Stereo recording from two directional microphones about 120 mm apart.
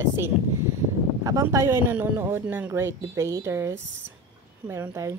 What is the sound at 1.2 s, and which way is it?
Speech, 30° right (ahead or behind).